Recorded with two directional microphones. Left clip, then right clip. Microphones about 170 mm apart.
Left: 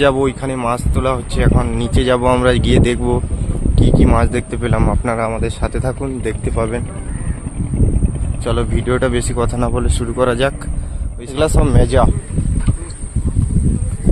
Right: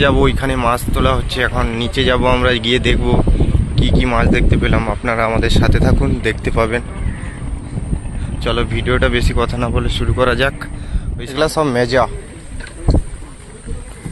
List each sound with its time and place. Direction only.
0.2 s speech: 5° left (ahead or behind); by 5.1 s 25° left (ahead or behind)
5.1 s speech: 10° left (ahead or behind)
8.4 s speech: 25° left (ahead or behind)